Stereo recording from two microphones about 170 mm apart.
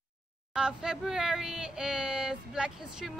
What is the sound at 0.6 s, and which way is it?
Speech, 5° right (ahead or behind).